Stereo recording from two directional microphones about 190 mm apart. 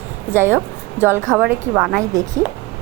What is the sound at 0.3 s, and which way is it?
A woman's voice, 10° right (ahead or behind).